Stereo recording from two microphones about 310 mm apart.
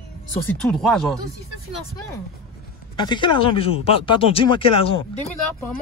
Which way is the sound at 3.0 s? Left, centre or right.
Centre.